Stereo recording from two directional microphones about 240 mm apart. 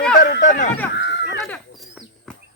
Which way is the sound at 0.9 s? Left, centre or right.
Left.